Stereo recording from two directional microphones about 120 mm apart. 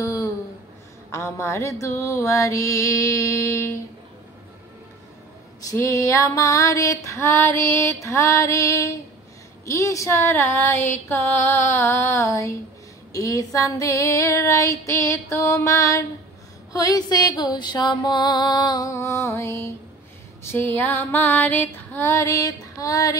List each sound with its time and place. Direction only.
0.0 s a sound: 25° left (ahead or behind)
1.1 s female singing: 25° left (ahead or behind)
5.6 s female singing: 25° left (ahead or behind)
16.7 s music: 30° left (ahead or behind)
20.4 s female singing: 15° left (ahead or behind)